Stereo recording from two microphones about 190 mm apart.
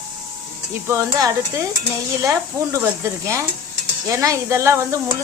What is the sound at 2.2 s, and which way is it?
Stir, 15° right (ahead or behind).